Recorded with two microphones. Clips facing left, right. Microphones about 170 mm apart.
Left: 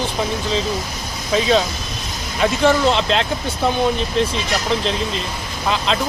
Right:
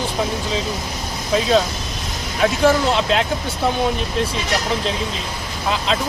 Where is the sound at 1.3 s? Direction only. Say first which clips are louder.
Even; centre (ahead or behind).